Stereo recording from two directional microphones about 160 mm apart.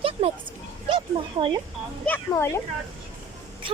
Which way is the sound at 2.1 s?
15° left (ahead or behind).